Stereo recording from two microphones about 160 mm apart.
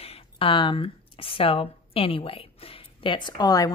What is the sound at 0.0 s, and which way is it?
Speech, 35° left (ahead or behind).